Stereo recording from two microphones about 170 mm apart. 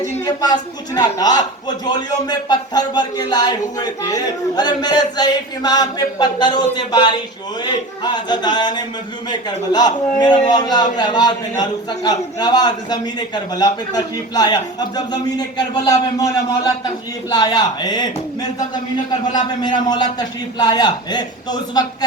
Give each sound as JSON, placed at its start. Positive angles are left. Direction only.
{"t": 0.3, "sound": "a man's voice", "side_deg": 25}
{"t": 17.3, "sound": "a man's voice", "side_deg": 25}